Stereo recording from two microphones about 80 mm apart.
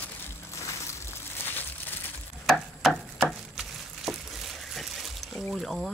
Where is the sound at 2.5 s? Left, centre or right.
Centre.